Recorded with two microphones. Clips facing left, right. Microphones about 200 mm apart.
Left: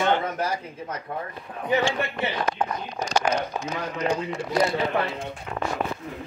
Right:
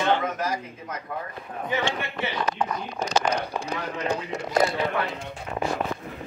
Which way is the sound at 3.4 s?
35° right (ahead or behind).